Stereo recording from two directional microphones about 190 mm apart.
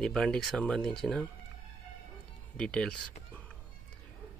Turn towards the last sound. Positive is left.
turn(degrees=5)  # may be behind; listen again after turning